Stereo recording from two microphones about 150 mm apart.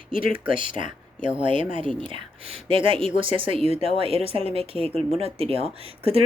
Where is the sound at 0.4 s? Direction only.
35° right (ahead or behind).